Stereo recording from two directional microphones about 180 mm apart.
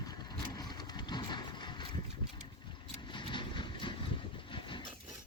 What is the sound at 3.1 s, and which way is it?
Vehicle, 25° left (ahead or behind).